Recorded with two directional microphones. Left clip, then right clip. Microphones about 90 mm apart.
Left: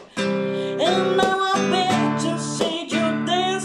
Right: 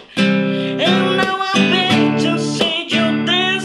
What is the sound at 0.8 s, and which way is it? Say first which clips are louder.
Music: right 4 dB; 20° right (ahead or behind).